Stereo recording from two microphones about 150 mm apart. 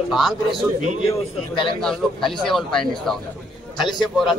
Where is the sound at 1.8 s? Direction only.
5° left (ahead or behind).